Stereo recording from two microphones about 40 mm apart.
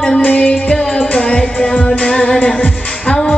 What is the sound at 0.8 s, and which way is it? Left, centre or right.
Music, centre.